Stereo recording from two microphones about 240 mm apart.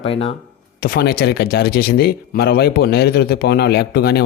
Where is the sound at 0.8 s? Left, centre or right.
Left.